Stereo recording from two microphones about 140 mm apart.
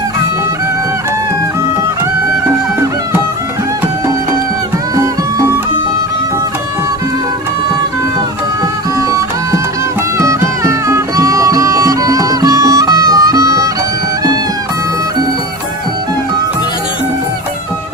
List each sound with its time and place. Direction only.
4.9 s music: 25° right (ahead or behind)
9.0 s music: 25° right (ahead or behind)